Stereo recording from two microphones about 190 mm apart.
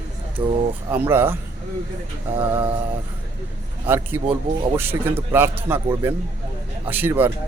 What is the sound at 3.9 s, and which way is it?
Speech, 10° right (ahead or behind).